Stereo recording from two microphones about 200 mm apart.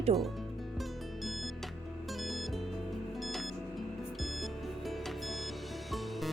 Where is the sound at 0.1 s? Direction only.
30° right (ahead or behind).